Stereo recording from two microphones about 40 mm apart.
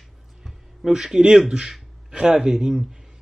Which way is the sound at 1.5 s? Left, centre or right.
Centre.